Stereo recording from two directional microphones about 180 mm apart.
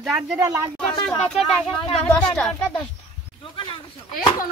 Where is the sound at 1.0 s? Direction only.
Centre (ahead or behind).